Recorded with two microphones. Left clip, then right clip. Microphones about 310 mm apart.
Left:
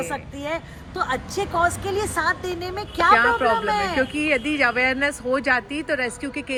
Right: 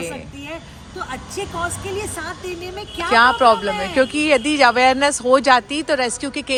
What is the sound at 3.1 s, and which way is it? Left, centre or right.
Speech, centre.